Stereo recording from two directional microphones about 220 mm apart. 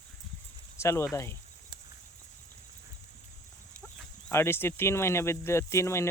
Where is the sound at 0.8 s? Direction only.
10° left (ahead or behind).